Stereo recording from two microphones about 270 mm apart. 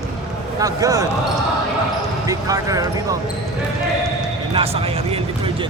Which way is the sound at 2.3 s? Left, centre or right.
Centre.